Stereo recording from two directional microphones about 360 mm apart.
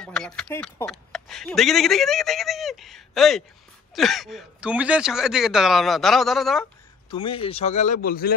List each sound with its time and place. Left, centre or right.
0.0 s speech: centre
7.1 s speech: centre